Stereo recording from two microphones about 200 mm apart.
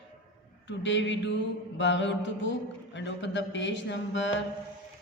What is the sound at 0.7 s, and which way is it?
Mantra, 65° left (ahead or behind).